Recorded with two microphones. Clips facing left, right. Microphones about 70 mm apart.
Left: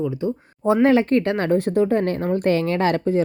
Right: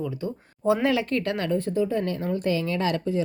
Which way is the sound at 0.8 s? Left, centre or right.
Left.